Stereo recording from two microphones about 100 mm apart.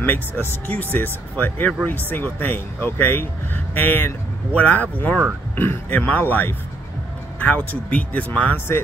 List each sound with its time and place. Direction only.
0.4 s speech: 15° left (ahead or behind)